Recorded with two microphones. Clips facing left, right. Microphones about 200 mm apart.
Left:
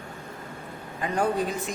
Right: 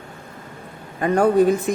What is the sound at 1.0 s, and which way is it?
Speech, 55° right (ahead or behind).